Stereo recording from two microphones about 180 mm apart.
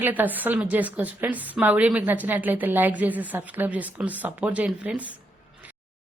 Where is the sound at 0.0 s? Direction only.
10° right (ahead or behind).